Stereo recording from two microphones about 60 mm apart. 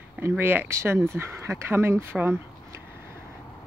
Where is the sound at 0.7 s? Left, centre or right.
Right.